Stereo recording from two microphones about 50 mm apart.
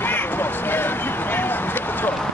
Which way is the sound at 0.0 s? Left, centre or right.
Left.